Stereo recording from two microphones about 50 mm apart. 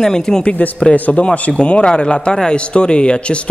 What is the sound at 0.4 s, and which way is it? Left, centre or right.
Speech, left.